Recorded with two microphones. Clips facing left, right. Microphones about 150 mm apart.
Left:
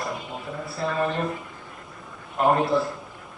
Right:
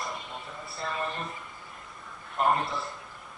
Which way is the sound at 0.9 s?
45° left (ahead or behind).